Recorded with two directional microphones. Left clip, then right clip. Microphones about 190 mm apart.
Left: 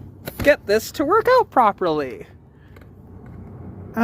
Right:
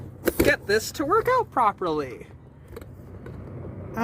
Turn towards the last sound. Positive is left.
turn(degrees=45)  # may be behind; listen again after turning